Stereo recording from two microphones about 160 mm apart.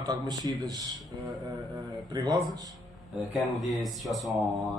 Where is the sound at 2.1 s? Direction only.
25° right (ahead or behind).